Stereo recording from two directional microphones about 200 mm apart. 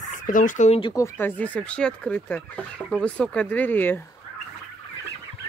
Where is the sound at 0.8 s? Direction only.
15° left (ahead or behind).